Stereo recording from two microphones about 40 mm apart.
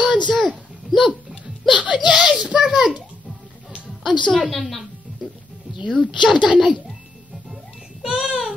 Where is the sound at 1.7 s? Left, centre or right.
Right.